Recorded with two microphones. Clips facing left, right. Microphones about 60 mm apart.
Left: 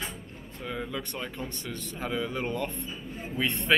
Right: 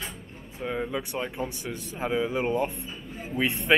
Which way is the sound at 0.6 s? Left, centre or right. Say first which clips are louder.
Right 5 dB; right.